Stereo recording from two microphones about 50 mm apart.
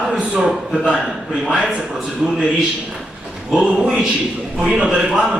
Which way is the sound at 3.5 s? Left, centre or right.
Centre.